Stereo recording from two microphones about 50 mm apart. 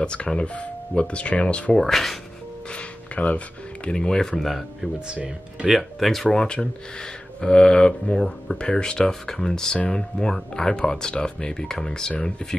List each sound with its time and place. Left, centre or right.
0.0 s speech: centre
1.8 s speech: centre
2.7 s speech: left; by 4.6 s centre
5.0 s speech: centre
5.7 s speech: centre
6.3 s speech: centre